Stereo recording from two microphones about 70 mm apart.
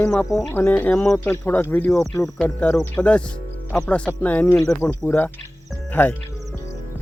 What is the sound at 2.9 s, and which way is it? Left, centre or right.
Speech, centre.